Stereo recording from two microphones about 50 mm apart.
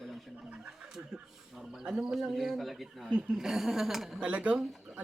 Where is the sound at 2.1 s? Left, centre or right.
Centre.